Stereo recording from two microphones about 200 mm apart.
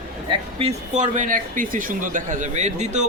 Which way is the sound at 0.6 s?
35° right (ahead or behind).